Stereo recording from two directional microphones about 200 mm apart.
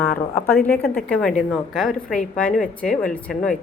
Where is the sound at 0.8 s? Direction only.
50° left (ahead or behind).